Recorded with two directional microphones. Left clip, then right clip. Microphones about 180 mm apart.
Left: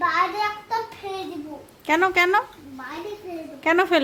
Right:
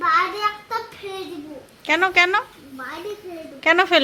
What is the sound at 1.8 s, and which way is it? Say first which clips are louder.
Speech: right 2 dB; 10° left (ahead or behind).